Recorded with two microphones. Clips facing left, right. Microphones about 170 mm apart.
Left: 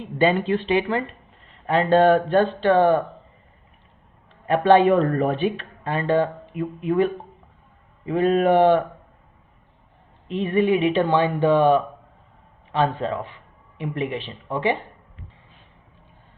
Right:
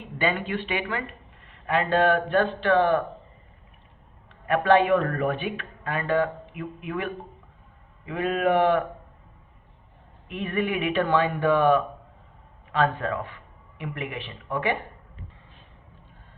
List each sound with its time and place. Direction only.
0.2 s speech: 30° left (ahead or behind)
4.4 s speech: 30° left (ahead or behind)
10.2 s a man's voice: 25° left (ahead or behind)